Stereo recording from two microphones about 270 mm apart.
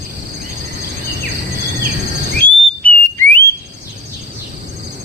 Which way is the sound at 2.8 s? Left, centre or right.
Centre.